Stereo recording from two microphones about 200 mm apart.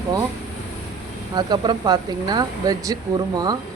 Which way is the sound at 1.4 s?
20° right (ahead or behind).